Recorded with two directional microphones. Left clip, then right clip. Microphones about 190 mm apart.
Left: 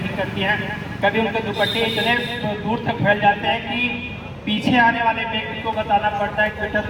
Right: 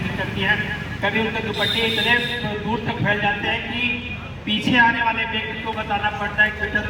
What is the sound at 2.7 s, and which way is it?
A man's voice, 40° left (ahead or behind).